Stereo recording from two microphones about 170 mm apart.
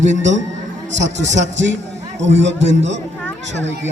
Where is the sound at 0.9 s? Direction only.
90° right.